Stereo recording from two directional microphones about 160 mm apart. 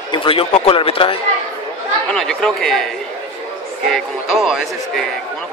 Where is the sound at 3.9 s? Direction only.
Centre (ahead or behind).